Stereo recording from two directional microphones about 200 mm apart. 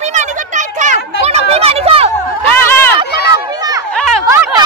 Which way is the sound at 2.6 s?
10° left (ahead or behind).